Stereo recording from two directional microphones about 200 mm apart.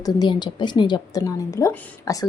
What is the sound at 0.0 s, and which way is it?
A woman's voice, 20° left (ahead or behind).